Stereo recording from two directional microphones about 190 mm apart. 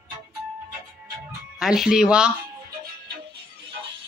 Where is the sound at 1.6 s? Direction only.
5° right (ahead or behind).